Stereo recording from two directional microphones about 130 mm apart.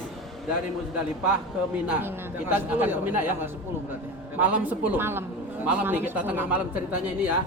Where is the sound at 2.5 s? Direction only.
15° right (ahead or behind).